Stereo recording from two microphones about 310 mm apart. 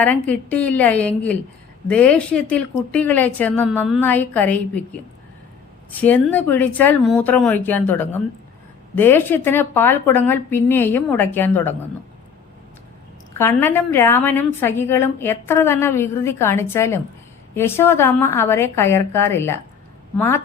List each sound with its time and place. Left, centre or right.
0.0 s speech: centre
5.9 s a woman's voice: centre
13.4 s a woman's voice: centre